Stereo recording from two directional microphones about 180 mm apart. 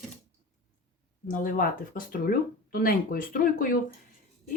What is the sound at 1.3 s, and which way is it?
Speech, 50° left (ahead or behind).